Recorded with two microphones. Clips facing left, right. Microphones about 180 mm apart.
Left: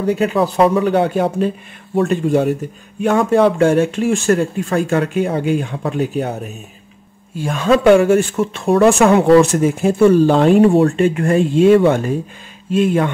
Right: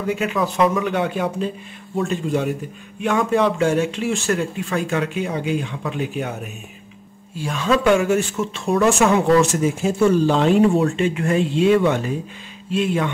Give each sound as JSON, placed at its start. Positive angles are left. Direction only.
{"t": 0.0, "sound": "speech", "side_deg": 35}
{"t": 2.0, "sound": "speech", "side_deg": 50}
{"t": 7.3, "sound": "speech", "side_deg": 50}